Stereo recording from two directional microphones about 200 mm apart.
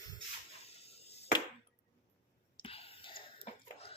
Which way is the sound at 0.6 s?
30° left (ahead or behind).